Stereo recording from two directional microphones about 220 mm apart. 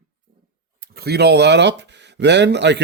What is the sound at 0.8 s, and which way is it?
Speech, 45° right (ahead or behind).